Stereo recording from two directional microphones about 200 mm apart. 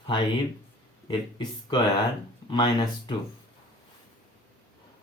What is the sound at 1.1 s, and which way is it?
Speech, 25° left (ahead or behind).